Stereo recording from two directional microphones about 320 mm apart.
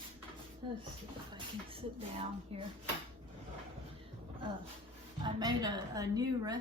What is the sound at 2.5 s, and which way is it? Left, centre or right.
Speech, centre.